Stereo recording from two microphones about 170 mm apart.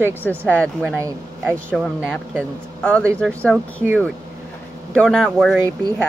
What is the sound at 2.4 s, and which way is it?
Speech, 5° left (ahead or behind).